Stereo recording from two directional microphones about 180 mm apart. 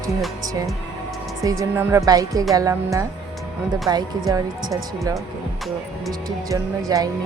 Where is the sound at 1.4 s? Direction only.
20° right (ahead or behind).